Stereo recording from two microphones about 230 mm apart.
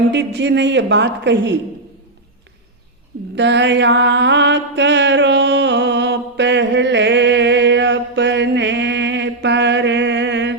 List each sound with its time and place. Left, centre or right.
0.1 s a woman's voice: right
3.3 s mantra: right